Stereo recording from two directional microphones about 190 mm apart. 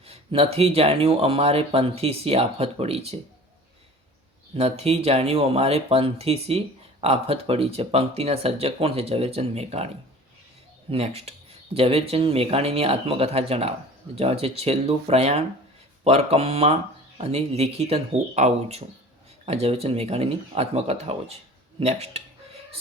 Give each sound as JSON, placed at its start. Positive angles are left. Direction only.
{"t": 0.0, "sound": "speech", "side_deg": -30}
{"t": 4.5, "sound": "speech", "side_deg": -35}
{"t": 10.9, "sound": "speech", "side_deg": -35}